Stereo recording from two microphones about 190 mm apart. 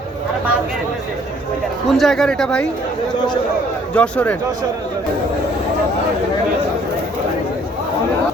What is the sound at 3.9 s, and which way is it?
Speech, 5° left (ahead or behind).